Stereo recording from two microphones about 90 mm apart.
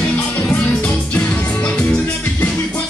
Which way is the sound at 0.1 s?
15° left (ahead or behind).